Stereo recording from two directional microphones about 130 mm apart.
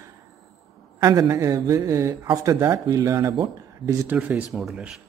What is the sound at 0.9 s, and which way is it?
Speech, 25° right (ahead or behind).